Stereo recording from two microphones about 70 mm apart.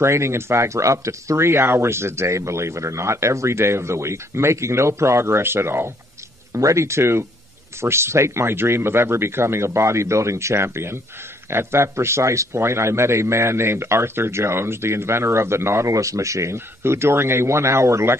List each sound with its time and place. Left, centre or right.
0.0 s speech: right
6.5 s speech: right